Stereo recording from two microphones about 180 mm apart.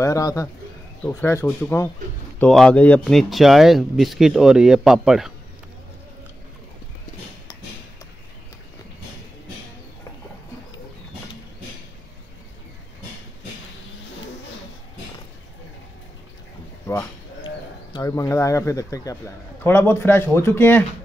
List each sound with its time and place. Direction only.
0.0 s a man's voice: 20° left (ahead or behind); by 5.3 s centre (ahead or behind)
17.9 s a man's voice: 20° left (ahead or behind)